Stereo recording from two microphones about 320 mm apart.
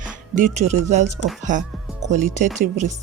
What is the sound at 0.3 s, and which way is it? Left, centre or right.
Speech, right.